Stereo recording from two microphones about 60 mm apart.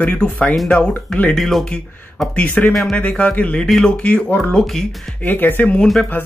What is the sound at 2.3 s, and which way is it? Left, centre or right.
Speech, left.